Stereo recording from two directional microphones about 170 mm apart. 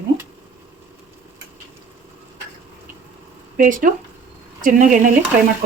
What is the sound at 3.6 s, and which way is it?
Speech, 50° right (ahead or behind).